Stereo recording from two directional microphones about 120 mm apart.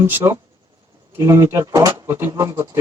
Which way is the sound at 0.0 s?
20° right (ahead or behind).